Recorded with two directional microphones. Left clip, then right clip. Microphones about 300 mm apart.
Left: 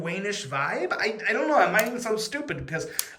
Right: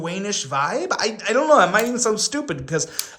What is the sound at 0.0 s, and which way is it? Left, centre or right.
A man's voice, centre.